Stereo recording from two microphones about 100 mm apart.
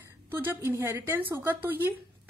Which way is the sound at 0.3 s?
20° right (ahead or behind).